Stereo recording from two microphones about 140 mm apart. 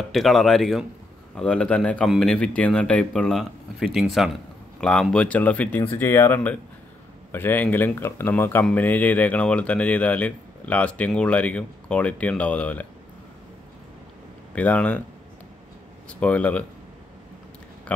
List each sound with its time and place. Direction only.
0.1 s speech: centre (ahead or behind)
14.5 s speech: 10° left (ahead or behind)
16.1 s speech: 10° left (ahead or behind)